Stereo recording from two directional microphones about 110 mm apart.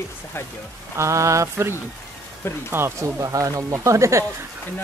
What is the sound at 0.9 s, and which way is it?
Speech, 30° right (ahead or behind).